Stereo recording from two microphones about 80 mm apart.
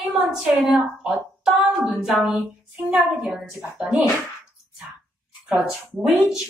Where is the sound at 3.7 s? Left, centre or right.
Centre.